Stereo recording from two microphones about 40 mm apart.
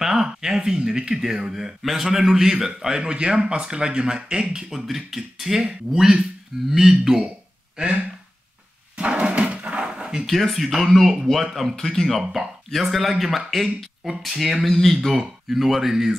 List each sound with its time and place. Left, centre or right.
0.0 s a sound: centre
0.7 s speech: centre
4.6 s speech: centre
7.7 s speech: right
8.9 s a sound: right
10.2 s speech: centre
11.7 s speech: centre
12.2 s speech: centre